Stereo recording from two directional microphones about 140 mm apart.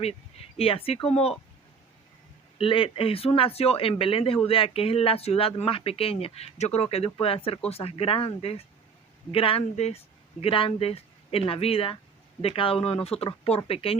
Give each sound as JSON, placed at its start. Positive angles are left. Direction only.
{"t": 0.0, "sound": "speech", "side_deg": 45}
{"t": 2.6, "sound": "speech", "side_deg": 40}